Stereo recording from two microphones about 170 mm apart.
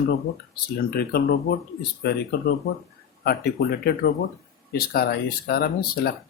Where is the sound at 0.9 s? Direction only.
65° left (ahead or behind).